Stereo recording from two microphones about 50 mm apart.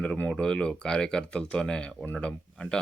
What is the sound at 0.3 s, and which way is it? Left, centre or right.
Speech, centre.